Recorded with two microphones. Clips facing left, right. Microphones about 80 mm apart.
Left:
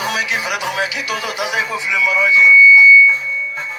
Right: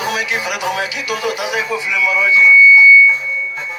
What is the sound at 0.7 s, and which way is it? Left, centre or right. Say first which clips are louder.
Speech: even; left.